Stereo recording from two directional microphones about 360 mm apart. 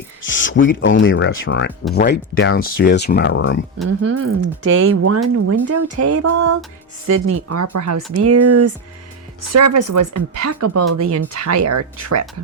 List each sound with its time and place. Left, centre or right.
0.3 s speech: left
4.0 s speech: right